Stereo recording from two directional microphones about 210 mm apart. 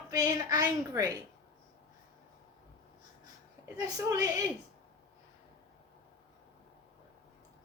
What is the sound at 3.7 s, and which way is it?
Speech, 15° right (ahead or behind).